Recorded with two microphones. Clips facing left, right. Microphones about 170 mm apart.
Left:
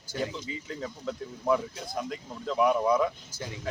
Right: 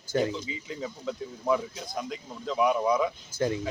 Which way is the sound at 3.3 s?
50° right (ahead or behind).